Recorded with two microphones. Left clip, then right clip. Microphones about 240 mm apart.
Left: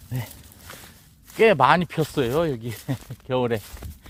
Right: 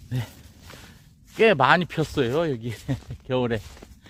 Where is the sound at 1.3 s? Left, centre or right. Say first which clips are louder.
Left 1 dB; centre.